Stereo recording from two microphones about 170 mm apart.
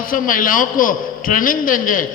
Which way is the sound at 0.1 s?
55° left (ahead or behind).